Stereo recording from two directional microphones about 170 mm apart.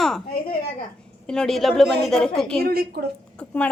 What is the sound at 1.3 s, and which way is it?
A woman's voice, 5° left (ahead or behind).